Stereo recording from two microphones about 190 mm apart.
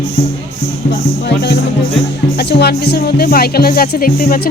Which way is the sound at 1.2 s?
60° left (ahead or behind).